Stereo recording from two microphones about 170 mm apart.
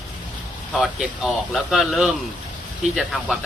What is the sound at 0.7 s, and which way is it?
Speech, centre (ahead or behind).